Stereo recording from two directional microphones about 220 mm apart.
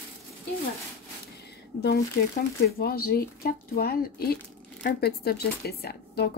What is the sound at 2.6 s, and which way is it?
Speech, 45° left (ahead or behind).